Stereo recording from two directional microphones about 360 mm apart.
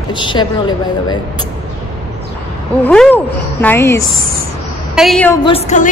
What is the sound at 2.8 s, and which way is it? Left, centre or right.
A woman's voice, centre.